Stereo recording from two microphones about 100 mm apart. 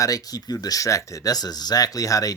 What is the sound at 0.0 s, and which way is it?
Speech, 40° left (ahead or behind).